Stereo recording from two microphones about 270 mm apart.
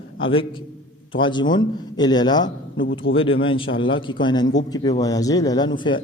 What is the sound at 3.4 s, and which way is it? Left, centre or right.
A man's voice, centre.